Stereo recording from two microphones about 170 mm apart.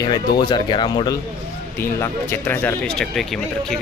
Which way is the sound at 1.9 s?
15° left (ahead or behind).